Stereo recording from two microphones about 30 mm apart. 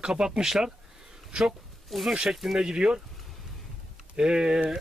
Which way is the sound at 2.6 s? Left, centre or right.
Right.